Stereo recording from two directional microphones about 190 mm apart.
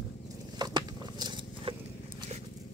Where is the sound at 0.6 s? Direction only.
20° right (ahead or behind).